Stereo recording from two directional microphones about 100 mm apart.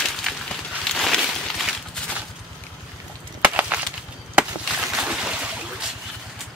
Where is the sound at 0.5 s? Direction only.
5° left (ahead or behind).